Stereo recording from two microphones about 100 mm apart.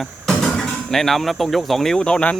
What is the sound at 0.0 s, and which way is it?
Speech, 5° left (ahead or behind).